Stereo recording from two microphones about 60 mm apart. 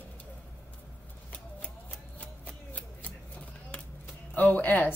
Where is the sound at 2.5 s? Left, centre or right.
Left.